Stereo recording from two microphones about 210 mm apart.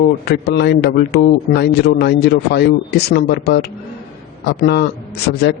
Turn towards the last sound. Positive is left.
turn(degrees=55)  # may be behind; listen again after turning